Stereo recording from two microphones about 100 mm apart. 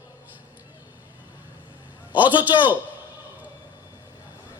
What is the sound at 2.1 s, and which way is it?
Speech, 15° right (ahead or behind).